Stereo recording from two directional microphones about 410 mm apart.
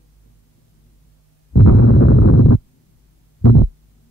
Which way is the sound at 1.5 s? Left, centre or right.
Left.